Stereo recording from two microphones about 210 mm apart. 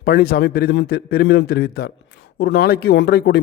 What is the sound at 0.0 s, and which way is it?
Speech, 45° left (ahead or behind).